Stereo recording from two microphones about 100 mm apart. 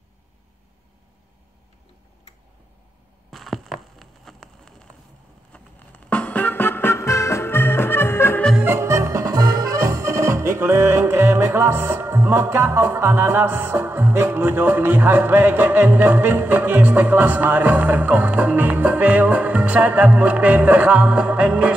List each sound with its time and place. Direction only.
3.3 s a sound: centre (ahead or behind)
5.5 s music: 15° left (ahead or behind)
8.6 s music: 25° right (ahead or behind)